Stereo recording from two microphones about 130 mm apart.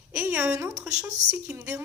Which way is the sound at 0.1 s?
15° right (ahead or behind).